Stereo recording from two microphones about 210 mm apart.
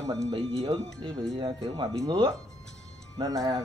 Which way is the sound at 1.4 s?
20° right (ahead or behind).